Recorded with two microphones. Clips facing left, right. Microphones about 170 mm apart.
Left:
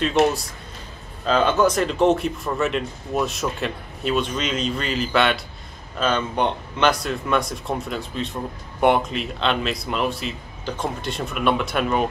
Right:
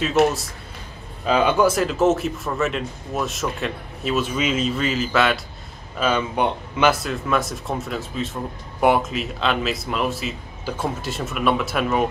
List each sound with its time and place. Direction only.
1.2 s a man's voice: 10° right (ahead or behind)